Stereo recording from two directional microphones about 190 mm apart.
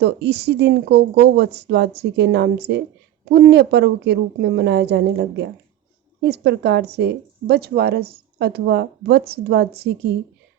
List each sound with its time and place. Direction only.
0.0 s a woman's voice: 60° right (ahead or behind)